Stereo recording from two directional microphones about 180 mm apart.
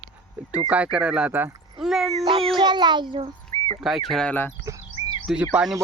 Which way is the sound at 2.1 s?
30° right (ahead or behind).